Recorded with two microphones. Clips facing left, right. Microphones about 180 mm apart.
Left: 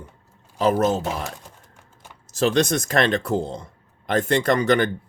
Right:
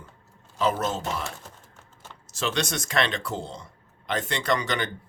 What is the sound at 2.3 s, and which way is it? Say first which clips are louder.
Speech: left 9 dB; 45° left (ahead or behind).